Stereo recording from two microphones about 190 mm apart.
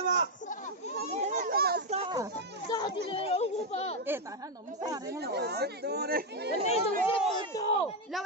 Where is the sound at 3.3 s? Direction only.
35° left (ahead or behind).